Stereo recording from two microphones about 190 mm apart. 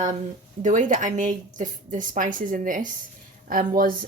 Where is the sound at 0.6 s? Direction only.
40° right (ahead or behind).